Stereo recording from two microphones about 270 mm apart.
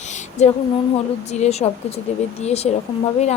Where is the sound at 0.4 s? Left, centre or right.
Left.